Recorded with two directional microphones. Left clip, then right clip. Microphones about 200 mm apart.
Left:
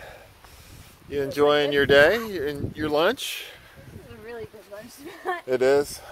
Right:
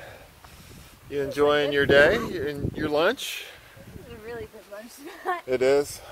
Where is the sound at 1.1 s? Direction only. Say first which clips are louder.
Left 1 dB; 20° left (ahead or behind).